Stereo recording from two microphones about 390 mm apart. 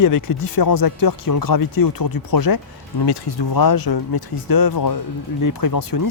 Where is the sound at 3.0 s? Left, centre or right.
Left.